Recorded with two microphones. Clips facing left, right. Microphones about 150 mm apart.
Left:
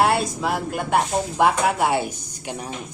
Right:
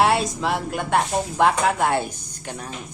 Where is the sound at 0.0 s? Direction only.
Centre (ahead or behind).